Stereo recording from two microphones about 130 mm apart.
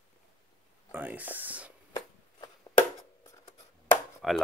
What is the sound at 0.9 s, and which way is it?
Speech, 10° right (ahead or behind).